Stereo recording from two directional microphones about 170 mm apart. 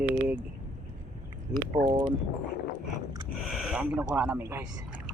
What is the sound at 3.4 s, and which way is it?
Speech, centre (ahead or behind).